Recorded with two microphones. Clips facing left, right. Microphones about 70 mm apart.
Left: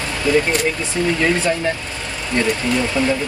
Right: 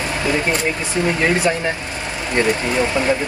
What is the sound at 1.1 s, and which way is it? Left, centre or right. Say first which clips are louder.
A man's voice: right 1 dB; right.